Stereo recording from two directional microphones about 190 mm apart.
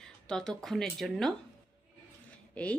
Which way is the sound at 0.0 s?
5° left (ahead or behind).